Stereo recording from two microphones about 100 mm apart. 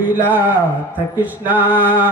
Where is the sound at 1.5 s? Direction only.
15° right (ahead or behind).